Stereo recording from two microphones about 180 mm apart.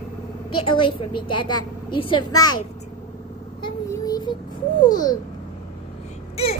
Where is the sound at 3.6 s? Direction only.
20° left (ahead or behind).